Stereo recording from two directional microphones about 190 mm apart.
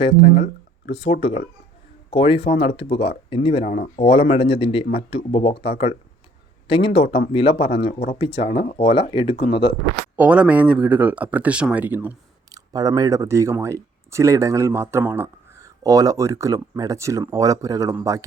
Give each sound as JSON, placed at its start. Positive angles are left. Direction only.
{"t": 0.0, "sound": "speech", "side_deg": 30}
{"t": 10.2, "sound": "speech", "side_deg": -5}
{"t": 12.5, "sound": "speech", "side_deg": -20}